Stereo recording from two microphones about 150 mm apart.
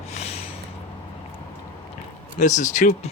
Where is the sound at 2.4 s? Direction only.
55° left (ahead or behind).